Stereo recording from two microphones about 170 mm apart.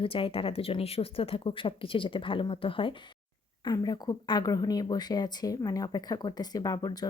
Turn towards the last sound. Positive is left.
turn(degrees=25)  # may be behind; listen again after turning